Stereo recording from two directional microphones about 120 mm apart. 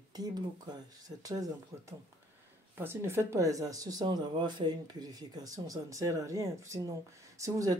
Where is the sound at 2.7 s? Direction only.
20° right (ahead or behind).